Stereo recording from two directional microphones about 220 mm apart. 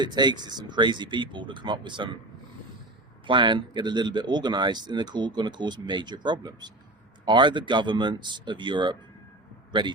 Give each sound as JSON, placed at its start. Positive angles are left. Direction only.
{"t": 0.0, "sound": "speech", "side_deg": -20}
{"t": 3.2, "sound": "speech", "side_deg": -20}